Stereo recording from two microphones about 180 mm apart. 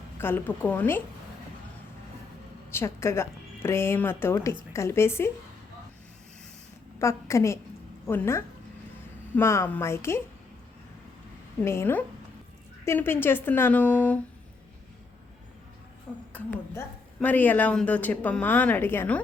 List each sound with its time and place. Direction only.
0.2 s a woman's voice: 10° left (ahead or behind)
2.7 s a woman's voice: 15° left (ahead or behind)
7.0 s a woman's voice: 15° left (ahead or behind)
11.6 s a woman's voice: 15° left (ahead or behind)
16.3 s a woman's voice: 10° left (ahead or behind)